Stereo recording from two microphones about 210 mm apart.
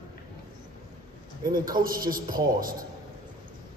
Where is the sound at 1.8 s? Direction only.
20° right (ahead or behind).